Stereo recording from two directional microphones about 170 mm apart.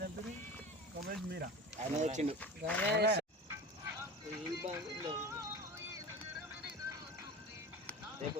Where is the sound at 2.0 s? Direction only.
45° right (ahead or behind).